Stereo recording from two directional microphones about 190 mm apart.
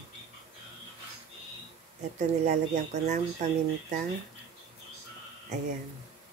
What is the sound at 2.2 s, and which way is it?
Speech, 35° right (ahead or behind).